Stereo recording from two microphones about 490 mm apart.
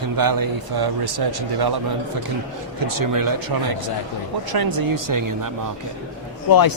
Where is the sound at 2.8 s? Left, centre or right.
Right.